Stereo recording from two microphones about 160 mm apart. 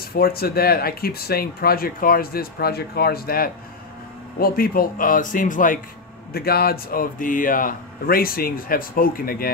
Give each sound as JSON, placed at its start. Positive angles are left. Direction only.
{"t": 0.1, "sound": "speech", "side_deg": 70}
{"t": 6.3, "sound": "speech", "side_deg": 70}